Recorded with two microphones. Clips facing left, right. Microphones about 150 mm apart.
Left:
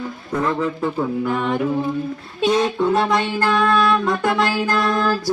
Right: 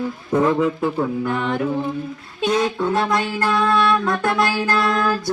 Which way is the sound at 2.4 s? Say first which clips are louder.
Left 2 dB; 25° left (ahead or behind).